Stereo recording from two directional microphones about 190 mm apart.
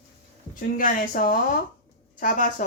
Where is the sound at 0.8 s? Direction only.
45° left (ahead or behind).